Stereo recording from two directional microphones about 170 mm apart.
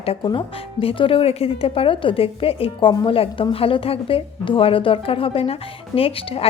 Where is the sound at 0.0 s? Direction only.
30° left (ahead or behind).